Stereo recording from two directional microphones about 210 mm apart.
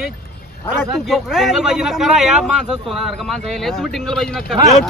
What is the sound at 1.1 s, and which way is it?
A man's voice, centre (ahead or behind).